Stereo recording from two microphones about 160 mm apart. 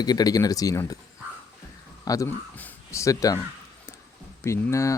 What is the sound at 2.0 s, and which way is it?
A man's voice, 20° left (ahead or behind).